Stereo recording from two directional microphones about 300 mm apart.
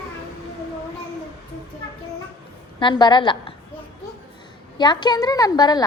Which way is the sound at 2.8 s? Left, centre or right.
Centre.